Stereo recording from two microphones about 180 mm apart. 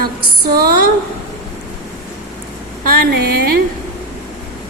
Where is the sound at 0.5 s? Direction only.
55° right (ahead or behind).